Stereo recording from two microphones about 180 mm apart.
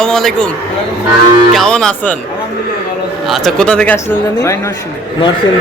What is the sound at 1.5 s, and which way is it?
Speech, 5° left (ahead or behind).